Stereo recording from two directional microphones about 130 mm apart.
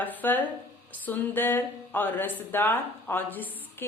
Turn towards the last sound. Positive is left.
turn(degrees=15)  # may be behind; listen again after turning